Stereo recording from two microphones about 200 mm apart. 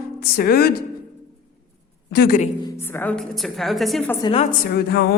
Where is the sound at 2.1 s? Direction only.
50° left (ahead or behind).